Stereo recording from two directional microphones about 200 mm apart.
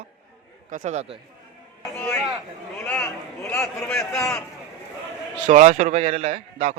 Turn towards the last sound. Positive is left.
turn(degrees=-30)  # may be behind; listen again after turning